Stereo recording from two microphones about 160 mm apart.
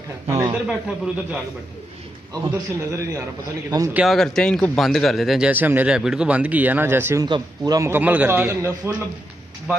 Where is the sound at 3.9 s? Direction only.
Centre (ahead or behind).